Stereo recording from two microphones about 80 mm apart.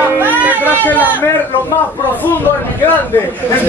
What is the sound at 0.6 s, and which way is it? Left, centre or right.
Speech, left.